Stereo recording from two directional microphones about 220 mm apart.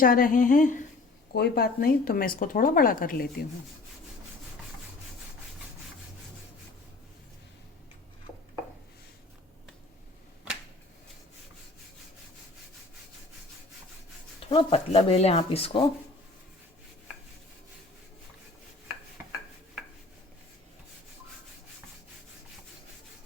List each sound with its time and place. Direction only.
0.0 s speech: 40° left (ahead or behind)
14.5 s speech: 25° left (ahead or behind)